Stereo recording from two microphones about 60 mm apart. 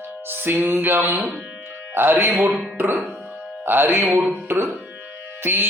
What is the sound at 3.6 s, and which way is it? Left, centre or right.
Speech, right.